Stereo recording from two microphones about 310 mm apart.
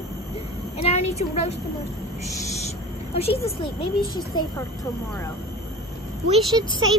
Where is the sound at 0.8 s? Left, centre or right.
Centre.